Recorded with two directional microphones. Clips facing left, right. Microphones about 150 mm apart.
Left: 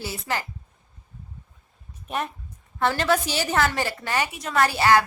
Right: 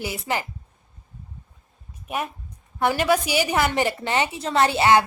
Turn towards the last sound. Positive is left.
turn(degrees=-20)  # may be behind; listen again after turning